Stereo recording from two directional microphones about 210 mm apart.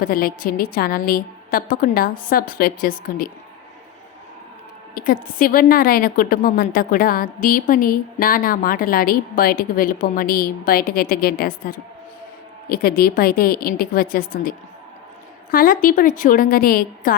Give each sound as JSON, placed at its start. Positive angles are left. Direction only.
{"t": 0.0, "sound": "a woman's voice", "side_deg": 45}
{"t": 4.9, "sound": "a woman's voice", "side_deg": 45}
{"t": 15.5, "sound": "a woman's voice", "side_deg": 40}